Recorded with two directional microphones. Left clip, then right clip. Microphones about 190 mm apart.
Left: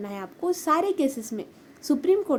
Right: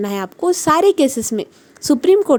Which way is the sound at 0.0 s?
55° right (ahead or behind).